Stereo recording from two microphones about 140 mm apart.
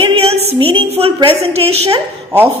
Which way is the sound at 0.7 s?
40° right (ahead or behind).